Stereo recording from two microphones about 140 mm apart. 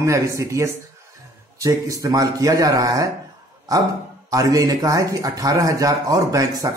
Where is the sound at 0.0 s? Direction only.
20° right (ahead or behind).